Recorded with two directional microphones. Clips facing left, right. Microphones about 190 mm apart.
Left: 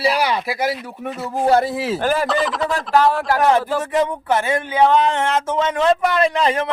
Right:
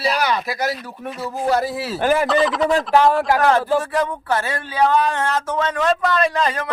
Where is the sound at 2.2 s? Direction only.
Centre (ahead or behind).